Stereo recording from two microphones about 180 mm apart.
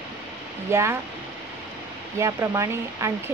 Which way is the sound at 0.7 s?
15° right (ahead or behind).